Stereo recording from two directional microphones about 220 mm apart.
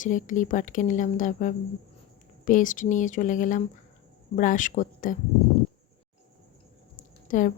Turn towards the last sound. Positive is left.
turn(degrees=35)  # may be behind; listen again after turning